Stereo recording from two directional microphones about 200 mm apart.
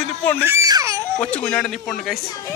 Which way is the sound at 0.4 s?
15° right (ahead or behind).